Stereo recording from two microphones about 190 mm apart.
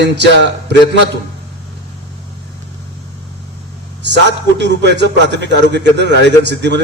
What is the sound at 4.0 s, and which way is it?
A man's voice, 65° right (ahead or behind).